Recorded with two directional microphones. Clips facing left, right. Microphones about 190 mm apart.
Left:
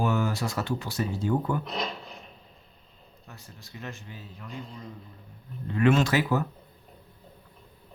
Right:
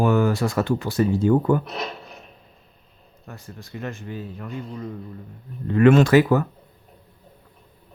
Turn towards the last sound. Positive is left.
turn(degrees=-55)  # may be behind; listen again after turning